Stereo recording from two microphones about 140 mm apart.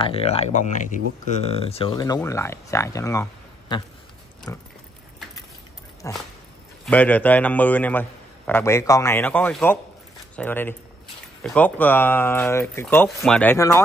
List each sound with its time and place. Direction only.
0.0 s speech: 45° left (ahead or behind); by 4.6 s 20° left (ahead or behind)
6.0 s a man's voice: 20° left (ahead or behind)
13.6 s speech: 25° left (ahead or behind)